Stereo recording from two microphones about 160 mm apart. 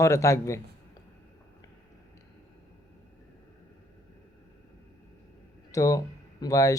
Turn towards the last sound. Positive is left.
turn(degrees=20)  # may be behind; listen again after turning